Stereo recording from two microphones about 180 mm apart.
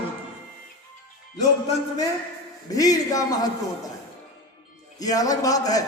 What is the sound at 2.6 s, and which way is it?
Speech, 20° left (ahead or behind).